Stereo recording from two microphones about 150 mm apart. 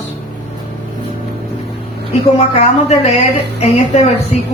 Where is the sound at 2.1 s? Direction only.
45° left (ahead or behind).